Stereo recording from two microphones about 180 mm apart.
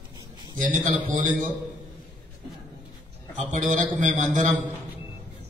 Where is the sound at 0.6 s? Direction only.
45° right (ahead or behind).